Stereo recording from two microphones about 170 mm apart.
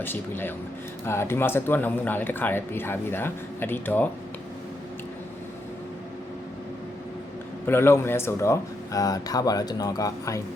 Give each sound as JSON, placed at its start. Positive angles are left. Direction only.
{"t": 0.0, "sound": "speech", "side_deg": 10}
{"t": 7.7, "sound": "speech", "side_deg": 15}